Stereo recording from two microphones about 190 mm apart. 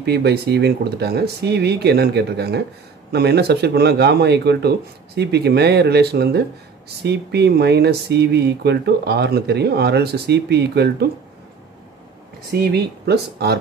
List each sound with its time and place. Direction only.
0.0 s speech: 60° right (ahead or behind)
12.4 s speech: 55° right (ahead or behind)